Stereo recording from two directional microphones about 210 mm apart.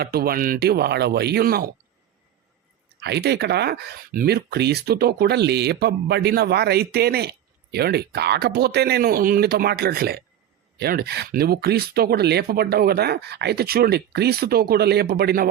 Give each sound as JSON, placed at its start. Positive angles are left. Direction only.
{"t": 0.0, "sound": "speech", "side_deg": -45}
{"t": 3.0, "sound": "speech", "side_deg": -50}